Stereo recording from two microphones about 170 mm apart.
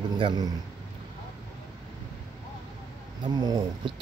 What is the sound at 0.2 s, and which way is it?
Speech, 20° right (ahead or behind).